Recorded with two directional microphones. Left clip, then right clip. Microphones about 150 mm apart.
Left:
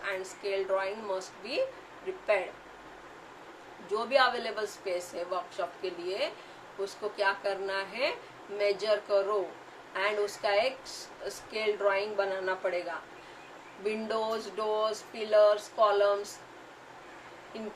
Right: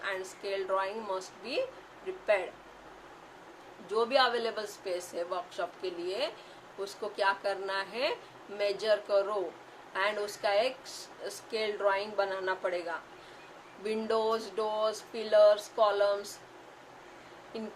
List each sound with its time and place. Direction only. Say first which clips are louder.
0.0 s a woman's voice: left 1 dB; 20° right (ahead or behind)
3.9 s a woman's voice: left 1 dB; 20° right (ahead or behind)
13.8 s a woman's voice: right 1 dB; 25° right (ahead or behind)